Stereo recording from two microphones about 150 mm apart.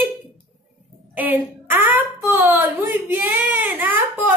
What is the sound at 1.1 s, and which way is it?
A woman's voice, 10° right (ahead or behind).